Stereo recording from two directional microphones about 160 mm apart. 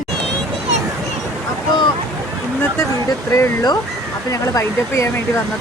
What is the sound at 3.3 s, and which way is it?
Speech, 20° left (ahead or behind).